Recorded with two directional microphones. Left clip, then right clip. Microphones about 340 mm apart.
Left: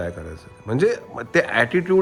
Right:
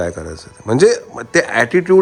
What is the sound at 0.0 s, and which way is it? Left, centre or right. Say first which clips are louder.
Speech: right 8 dB; centre.